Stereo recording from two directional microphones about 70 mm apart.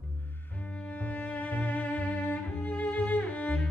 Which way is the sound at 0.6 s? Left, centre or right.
Centre.